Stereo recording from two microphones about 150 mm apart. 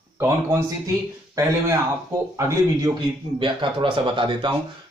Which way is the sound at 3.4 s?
35° right (ahead or behind).